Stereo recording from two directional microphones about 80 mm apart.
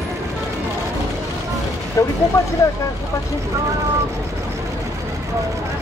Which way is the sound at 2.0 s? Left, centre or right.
Left.